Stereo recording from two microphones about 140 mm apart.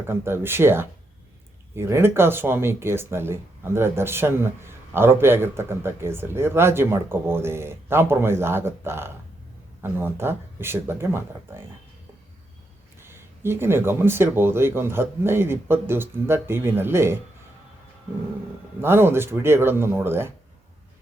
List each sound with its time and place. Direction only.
0.1 s speech: 15° right (ahead or behind)
13.0 s speech: 15° right (ahead or behind)
18.8 s speech: 15° right (ahead or behind)